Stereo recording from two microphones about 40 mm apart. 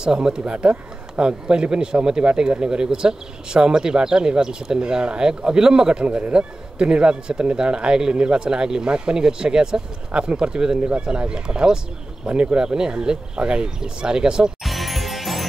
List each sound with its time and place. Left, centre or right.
0.0 s speech: centre
6.0 s speech: right
14.6 s music: centre